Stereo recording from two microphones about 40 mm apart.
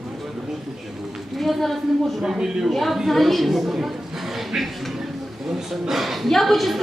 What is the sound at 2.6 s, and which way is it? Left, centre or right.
A woman's voice, centre.